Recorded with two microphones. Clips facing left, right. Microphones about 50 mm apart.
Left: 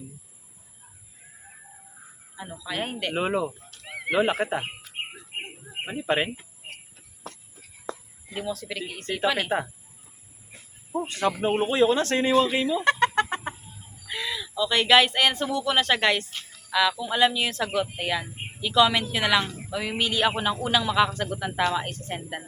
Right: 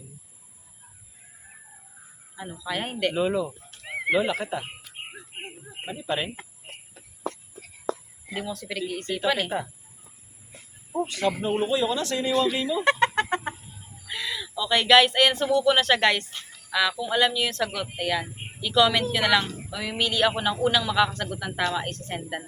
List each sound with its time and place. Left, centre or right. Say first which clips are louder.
2.3 s speech: right 2 dB; centre
3.2 s speech: even; left
3.7 s neigh: right 4 dB; right
4.1 s speech: left 1 dB; left
5.8 s speech: left 4 dB; left
8.4 s a woman's voice: even; centre
11.1 s speech: left 2 dB; left
12.3 s speech: left 1 dB; left
12.8 s chicken: right 2 dB; centre
14.1 s a woman's voice: left 1 dB; centre